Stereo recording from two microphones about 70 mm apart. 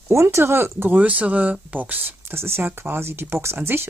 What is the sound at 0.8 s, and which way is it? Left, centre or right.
Speech, right.